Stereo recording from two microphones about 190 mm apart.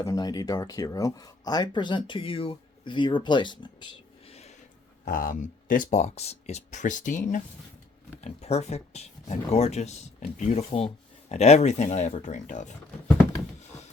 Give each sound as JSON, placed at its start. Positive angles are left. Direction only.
{"t": 0.0, "sound": "speech", "side_deg": 20}
{"t": 4.3, "sound": "a sound", "side_deg": 35}
{"t": 5.0, "sound": "speech", "side_deg": 45}
{"t": 8.2, "sound": "speech", "side_deg": 35}